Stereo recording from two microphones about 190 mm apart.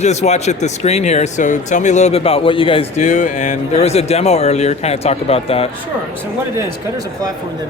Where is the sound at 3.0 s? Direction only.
40° left (ahead or behind).